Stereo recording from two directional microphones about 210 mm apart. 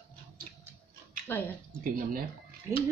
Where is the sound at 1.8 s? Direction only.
45° right (ahead or behind).